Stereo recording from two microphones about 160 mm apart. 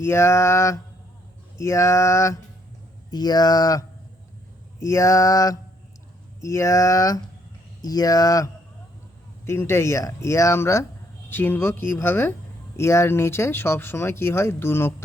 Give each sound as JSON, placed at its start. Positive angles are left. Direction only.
{"t": 0.0, "sound": "speech", "side_deg": 15}
{"t": 3.1, "sound": "a sound", "side_deg": 25}
{"t": 9.5, "sound": "speech", "side_deg": 15}